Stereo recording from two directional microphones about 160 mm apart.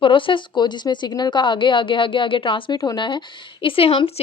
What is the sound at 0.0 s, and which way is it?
A woman's voice, 30° left (ahead or behind).